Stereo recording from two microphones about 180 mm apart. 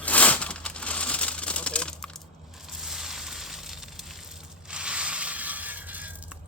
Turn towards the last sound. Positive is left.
turn(degrees=-10)  # may be behind; listen again after turning